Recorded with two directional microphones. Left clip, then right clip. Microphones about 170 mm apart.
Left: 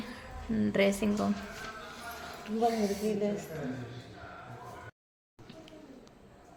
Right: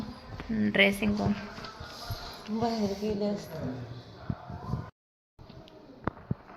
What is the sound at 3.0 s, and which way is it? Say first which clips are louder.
Speech: right 1 dB; 50° right (ahead or behind).